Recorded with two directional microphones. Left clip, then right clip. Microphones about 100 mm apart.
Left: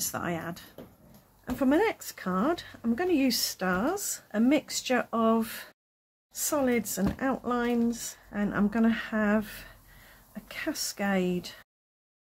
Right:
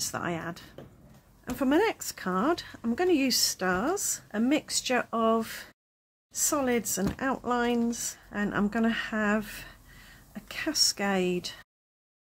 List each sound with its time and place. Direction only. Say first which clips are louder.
0.0 s speech: even; 40° right (ahead or behind); by 5.6 s 20° right (ahead or behind)
6.3 s speech: even; 45° right (ahead or behind)